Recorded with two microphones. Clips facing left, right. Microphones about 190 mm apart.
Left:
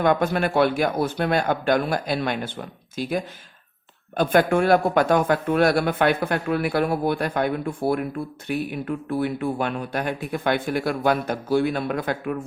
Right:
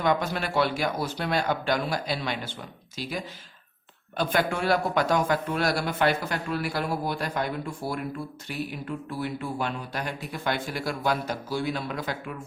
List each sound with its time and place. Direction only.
0.0 s speech: 55° left (ahead or behind)